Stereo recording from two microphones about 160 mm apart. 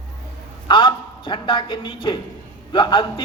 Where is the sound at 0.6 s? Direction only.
30° left (ahead or behind).